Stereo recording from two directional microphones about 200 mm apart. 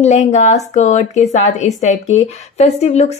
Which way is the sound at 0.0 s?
35° left (ahead or behind).